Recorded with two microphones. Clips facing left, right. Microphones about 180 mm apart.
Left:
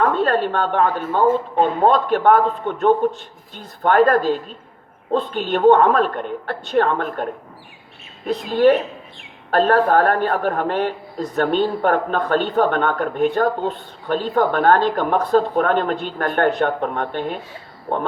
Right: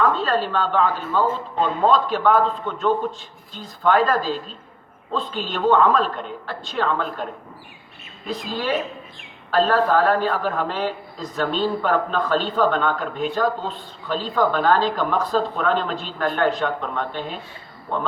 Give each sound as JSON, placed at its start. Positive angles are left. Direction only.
{"t": 0.0, "sound": "a woman's voice", "side_deg": 60}
{"t": 8.4, "sound": "a woman's voice", "side_deg": 60}